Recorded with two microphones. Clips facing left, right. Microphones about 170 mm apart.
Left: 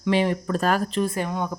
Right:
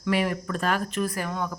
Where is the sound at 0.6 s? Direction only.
40° left (ahead or behind); by 1.5 s 20° left (ahead or behind).